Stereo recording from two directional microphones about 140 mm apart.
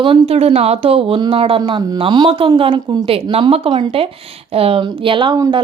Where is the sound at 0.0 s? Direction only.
40° right (ahead or behind).